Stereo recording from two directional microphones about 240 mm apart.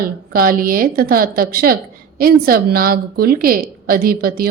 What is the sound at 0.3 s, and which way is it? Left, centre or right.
A woman's voice, right.